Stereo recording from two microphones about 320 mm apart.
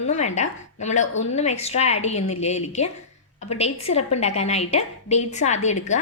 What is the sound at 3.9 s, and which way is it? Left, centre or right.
A woman's voice, centre.